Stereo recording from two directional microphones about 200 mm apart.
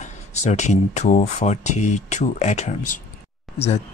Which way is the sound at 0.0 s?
35° left (ahead or behind).